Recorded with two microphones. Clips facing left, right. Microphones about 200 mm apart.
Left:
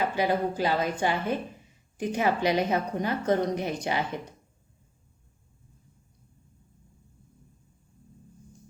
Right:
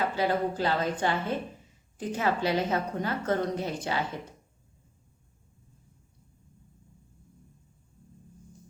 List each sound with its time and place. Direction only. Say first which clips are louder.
0.0 s a woman's voice: left 1 dB; 15° left (ahead or behind)